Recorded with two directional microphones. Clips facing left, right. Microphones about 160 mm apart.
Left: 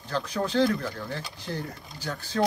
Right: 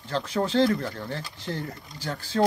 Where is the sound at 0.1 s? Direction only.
25° right (ahead or behind).